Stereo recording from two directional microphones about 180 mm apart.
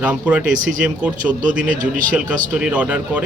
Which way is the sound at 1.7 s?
50° right (ahead or behind).